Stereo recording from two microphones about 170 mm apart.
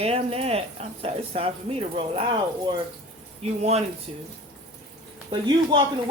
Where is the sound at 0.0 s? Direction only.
35° right (ahead or behind).